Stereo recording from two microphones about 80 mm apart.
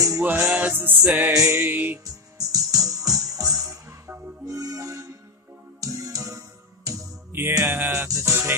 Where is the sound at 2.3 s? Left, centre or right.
Right.